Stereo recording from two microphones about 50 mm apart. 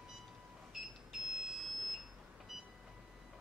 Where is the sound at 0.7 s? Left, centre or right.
Centre.